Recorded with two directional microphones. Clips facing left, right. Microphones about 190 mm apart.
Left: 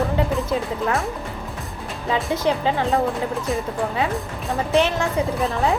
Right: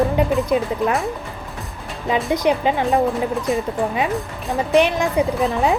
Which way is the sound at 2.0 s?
15° right (ahead or behind).